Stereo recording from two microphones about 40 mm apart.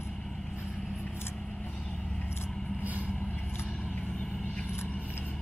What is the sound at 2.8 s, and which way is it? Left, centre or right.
Vehicle, right.